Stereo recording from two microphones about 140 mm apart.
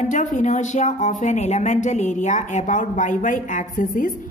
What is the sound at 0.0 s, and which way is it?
Speech, 65° left (ahead or behind).